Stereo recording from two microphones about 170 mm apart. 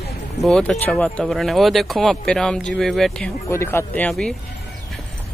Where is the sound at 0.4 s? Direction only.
5° left (ahead or behind).